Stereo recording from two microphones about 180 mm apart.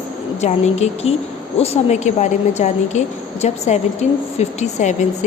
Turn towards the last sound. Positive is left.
turn(degrees=40)  # may be behind; listen again after turning